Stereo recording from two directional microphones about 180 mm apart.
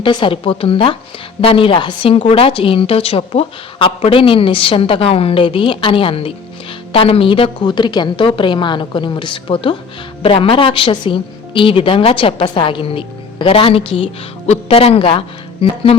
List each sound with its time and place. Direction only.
0.0 s a woman's voice: 25° left (ahead or behind)